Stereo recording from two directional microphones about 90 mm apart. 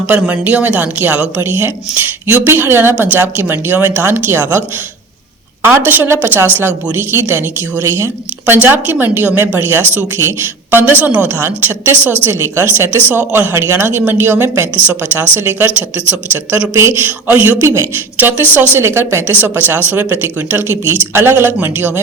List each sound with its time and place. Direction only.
0.1 s a woman's voice: 15° right (ahead or behind)
5.6 s a woman's voice: 25° right (ahead or behind)
16.7 s a woman's voice: 30° right (ahead or behind)